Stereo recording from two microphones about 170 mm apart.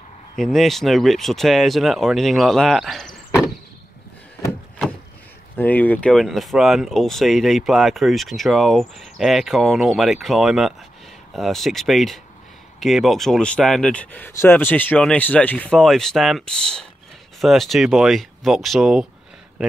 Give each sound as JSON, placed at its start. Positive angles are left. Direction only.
{"t": 0.4, "sound": "speech", "side_deg": 0}
{"t": 5.6, "sound": "speech", "side_deg": 10}